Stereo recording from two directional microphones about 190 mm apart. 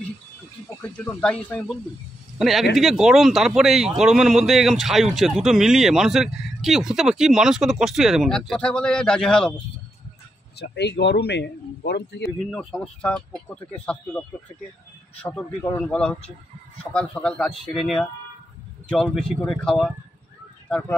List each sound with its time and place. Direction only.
0.8 s speech: 5° left (ahead or behind)
10.6 s speech: 60° left (ahead or behind)
12.4 s speech: 5° left (ahead or behind)